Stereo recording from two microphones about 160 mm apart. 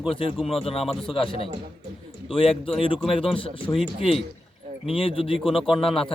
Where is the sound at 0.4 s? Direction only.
40° left (ahead or behind).